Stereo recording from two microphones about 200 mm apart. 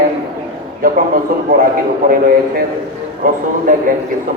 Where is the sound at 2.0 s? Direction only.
45° right (ahead or behind).